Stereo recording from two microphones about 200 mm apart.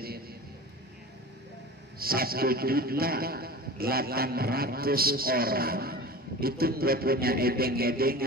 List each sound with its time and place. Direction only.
2.0 s a man's voice: 50° right (ahead or behind)